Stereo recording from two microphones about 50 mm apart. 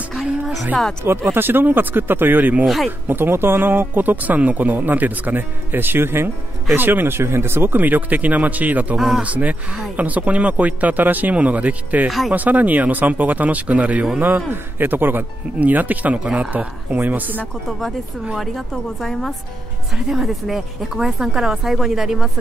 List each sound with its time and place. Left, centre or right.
1.0 s speech: right
2.6 s speech: centre
3.1 s speech: right
7.7 s speech: right
14.5 s speech: right
17.6 s speech: centre
20.1 s speech: centre